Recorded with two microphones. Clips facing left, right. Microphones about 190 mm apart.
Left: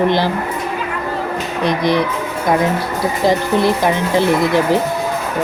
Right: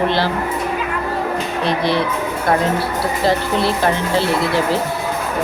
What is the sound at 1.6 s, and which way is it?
Speech, 15° left (ahead or behind).